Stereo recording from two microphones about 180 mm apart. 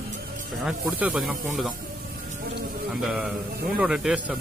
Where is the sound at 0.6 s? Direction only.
5° right (ahead or behind).